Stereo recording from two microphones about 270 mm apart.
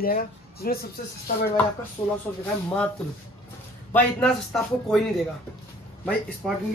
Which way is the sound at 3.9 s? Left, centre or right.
Centre.